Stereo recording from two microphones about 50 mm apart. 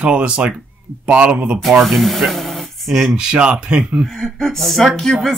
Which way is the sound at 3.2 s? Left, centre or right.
Centre.